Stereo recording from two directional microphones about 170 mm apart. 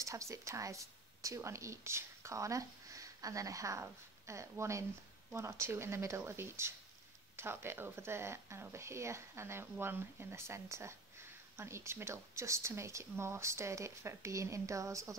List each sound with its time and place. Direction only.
0.0 s speech: 20° right (ahead or behind)